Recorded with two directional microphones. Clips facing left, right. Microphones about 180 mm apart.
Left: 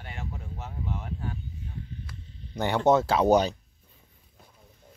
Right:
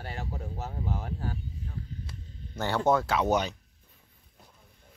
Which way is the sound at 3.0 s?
30° left (ahead or behind).